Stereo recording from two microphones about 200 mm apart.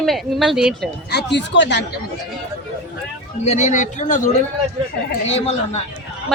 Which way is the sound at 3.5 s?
35° left (ahead or behind).